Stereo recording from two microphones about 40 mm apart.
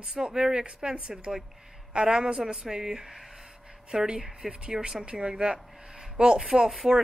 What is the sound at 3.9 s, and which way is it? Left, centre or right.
A woman's voice, right.